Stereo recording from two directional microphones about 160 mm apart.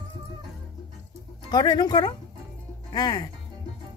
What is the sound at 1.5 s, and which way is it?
Speech, 25° left (ahead or behind).